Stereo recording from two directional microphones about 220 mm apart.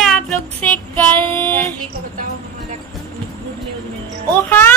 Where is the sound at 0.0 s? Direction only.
Centre (ahead or behind).